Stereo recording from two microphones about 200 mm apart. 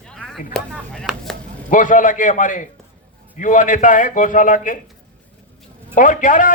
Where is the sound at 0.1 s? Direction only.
5° left (ahead or behind).